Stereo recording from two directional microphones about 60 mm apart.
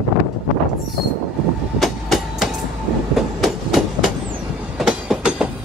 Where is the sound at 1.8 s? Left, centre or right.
Centre.